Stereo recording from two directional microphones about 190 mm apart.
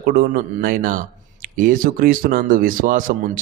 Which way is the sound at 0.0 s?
50° right (ahead or behind).